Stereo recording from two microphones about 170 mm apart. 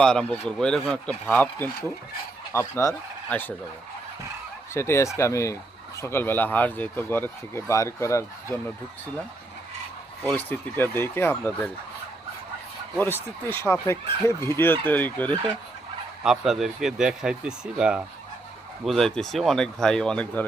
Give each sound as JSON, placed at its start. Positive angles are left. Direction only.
{"t": 0.0, "sound": "speech", "side_deg": 5}
{"t": 4.7, "sound": "speech", "side_deg": 15}
{"t": 10.2, "sound": "speech", "side_deg": 10}
{"t": 13.0, "sound": "speech", "side_deg": 10}
{"t": 16.2, "sound": "speech", "side_deg": -5}